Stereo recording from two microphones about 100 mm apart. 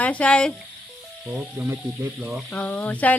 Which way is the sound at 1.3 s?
15° right (ahead or behind).